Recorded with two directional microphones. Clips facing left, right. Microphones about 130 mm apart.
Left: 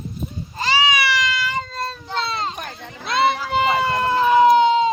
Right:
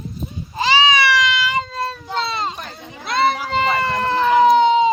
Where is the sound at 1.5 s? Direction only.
15° right (ahead or behind).